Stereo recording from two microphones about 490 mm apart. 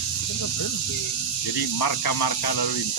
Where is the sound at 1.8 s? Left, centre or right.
Left.